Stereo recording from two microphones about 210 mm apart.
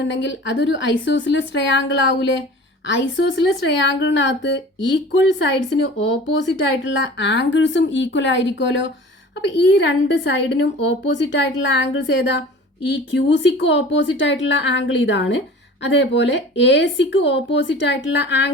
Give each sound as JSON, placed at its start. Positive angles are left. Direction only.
{"t": 0.1, "sound": "a woman's voice", "side_deg": 60}